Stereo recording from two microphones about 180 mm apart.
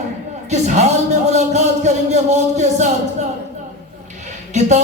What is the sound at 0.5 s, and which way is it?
A man's voice, 40° right (ahead or behind).